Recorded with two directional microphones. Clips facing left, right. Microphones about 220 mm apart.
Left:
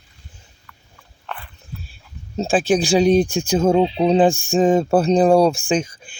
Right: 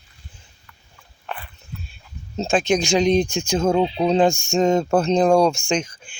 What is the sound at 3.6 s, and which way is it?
Speech, 20° left (ahead or behind).